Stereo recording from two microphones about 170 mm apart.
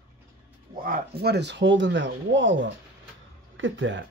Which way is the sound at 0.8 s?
60° right (ahead or behind).